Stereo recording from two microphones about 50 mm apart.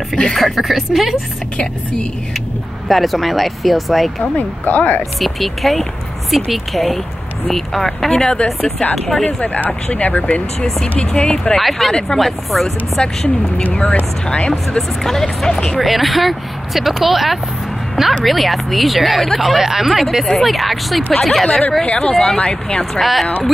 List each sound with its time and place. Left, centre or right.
0.4 s speech: centre
2.9 s speech: centre
4.2 s speech: left
5.2 s speech: centre
8.2 s speech: centre
8.5 s speech: centre
9.2 s speech: left
11.0 s speech: centre
11.5 s speech: centre
14.2 s speech: centre
15.8 s speech: centre
22.4 s speech: centre
22.9 s speech: centre